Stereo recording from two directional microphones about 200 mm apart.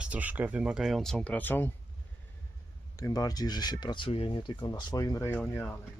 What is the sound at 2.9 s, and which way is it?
Speech, 20° left (ahead or behind).